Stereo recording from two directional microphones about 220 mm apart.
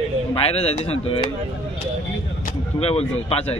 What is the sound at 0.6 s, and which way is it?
Speech, 25° left (ahead or behind).